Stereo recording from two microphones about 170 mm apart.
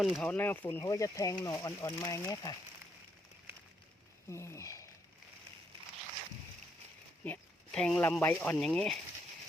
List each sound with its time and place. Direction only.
0.0 s speech: centre (ahead or behind); by 2.6 s 20° left (ahead or behind)
4.3 s a sound: 15° left (ahead or behind)
7.3 s speech: 5° left (ahead or behind)